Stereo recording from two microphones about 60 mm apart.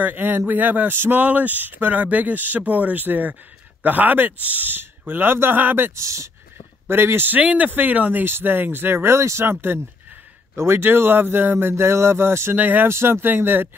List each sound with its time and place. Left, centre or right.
0.0 s a man's voice: right
5.9 s speech: right
6.9 s a man's voice: right
7.4 s a man's voice: right
12.8 s a man's voice: right